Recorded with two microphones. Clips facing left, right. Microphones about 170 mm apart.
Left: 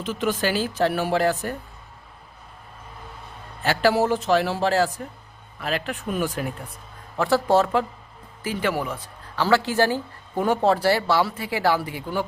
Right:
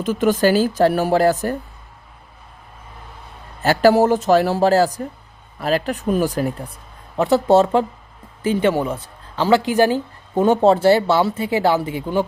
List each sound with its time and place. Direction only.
0.0 s speech: 45° right (ahead or behind)
3.6 s speech: 45° right (ahead or behind)
7.2 s speech: 20° right (ahead or behind)